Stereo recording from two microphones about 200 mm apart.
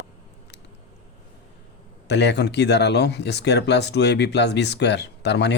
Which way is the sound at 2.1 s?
60° left (ahead or behind).